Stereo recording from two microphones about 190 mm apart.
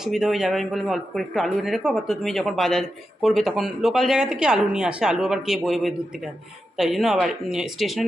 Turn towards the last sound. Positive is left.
turn(degrees=0)  # may be behind; listen again after turning